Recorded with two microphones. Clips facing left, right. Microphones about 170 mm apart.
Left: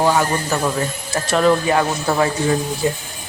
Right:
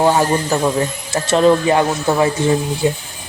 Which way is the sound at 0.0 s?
30° right (ahead or behind).